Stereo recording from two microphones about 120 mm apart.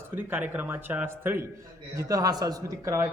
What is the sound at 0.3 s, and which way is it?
A man's voice, 15° right (ahead or behind).